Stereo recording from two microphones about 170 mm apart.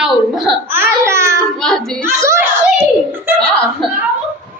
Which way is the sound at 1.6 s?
5° left (ahead or behind).